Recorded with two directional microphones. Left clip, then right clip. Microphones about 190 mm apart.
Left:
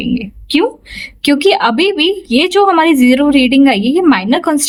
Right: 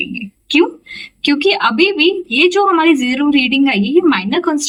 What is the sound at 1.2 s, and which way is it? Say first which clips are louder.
A woman's voice: left 3 dB; 55° left (ahead or behind).